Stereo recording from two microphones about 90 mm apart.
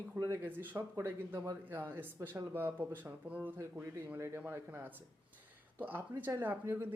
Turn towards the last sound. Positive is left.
turn(degrees=-30)  # may be behind; listen again after turning